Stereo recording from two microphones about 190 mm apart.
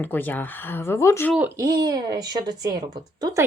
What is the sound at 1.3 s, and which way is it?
Speech, 10° right (ahead or behind).